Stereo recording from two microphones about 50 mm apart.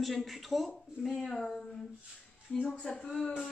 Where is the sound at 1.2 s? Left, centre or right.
Centre.